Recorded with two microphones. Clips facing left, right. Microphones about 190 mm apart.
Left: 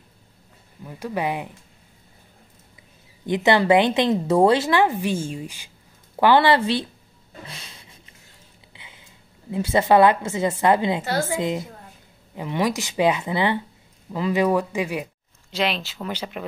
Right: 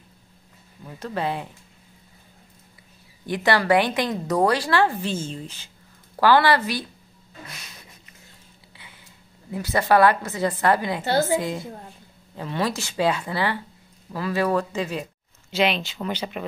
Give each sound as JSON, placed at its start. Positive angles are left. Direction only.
{"t": 0.8, "sound": "speech", "side_deg": 10}
{"t": 3.3, "sound": "speech", "side_deg": 20}
{"t": 8.7, "sound": "a sound", "side_deg": 20}
{"t": 9.5, "sound": "speech", "side_deg": 25}
{"t": 15.5, "sound": "speech", "side_deg": 0}